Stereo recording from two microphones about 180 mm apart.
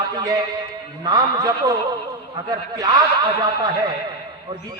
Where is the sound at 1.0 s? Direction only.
20° right (ahead or behind).